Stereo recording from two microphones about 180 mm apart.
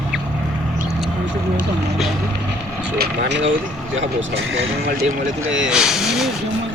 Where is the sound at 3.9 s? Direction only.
90° right.